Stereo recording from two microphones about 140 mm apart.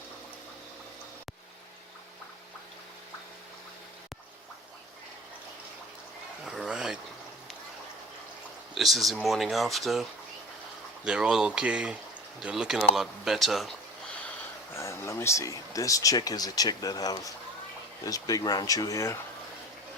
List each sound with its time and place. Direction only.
6.4 s a sound: 5° right (ahead or behind)
8.7 s speech: centre (ahead or behind)
14.3 s speech: 20° left (ahead or behind)